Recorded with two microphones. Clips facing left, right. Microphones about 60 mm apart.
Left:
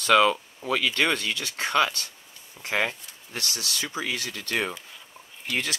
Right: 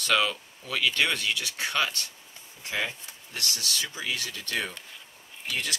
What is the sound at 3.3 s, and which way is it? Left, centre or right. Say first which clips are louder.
Speech: even; left.